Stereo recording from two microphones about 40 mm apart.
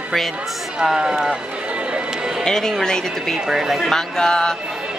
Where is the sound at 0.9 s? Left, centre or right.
Centre.